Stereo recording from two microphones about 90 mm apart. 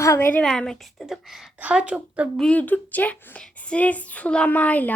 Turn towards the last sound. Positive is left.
turn(degrees=20)  # may be behind; listen again after turning